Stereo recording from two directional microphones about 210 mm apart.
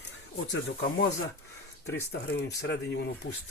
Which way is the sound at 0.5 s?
55° left (ahead or behind).